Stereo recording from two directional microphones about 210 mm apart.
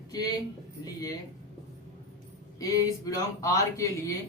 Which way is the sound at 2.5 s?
15° left (ahead or behind).